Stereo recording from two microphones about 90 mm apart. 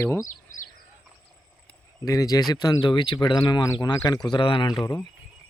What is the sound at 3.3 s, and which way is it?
Speech, 50° left (ahead or behind).